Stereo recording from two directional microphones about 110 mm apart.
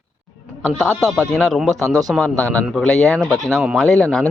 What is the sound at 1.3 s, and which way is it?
Speech, centre (ahead or behind).